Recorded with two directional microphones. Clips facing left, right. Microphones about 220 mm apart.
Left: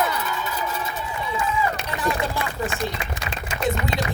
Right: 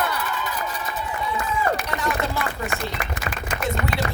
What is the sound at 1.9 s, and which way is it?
Run, 15° left (ahead or behind).